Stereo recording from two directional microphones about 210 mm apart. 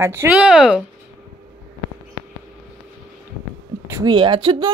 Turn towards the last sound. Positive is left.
turn(degrees=-20)  # may be behind; listen again after turning